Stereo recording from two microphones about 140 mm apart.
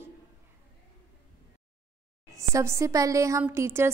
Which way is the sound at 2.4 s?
20° right (ahead or behind).